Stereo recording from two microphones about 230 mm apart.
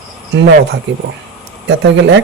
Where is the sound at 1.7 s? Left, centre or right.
Right.